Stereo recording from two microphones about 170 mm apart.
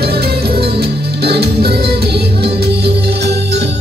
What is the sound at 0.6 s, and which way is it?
Music, 70° right (ahead or behind).